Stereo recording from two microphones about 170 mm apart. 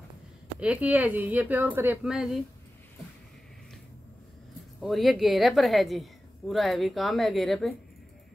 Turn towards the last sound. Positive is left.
turn(degrees=0)  # may be behind; listen again after turning